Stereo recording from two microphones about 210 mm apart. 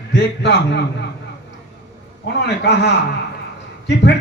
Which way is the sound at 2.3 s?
55° left (ahead or behind).